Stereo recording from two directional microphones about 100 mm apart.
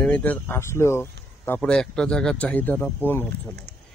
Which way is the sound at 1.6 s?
10° left (ahead or behind).